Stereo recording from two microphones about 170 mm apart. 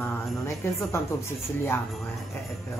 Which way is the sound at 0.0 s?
15° left (ahead or behind).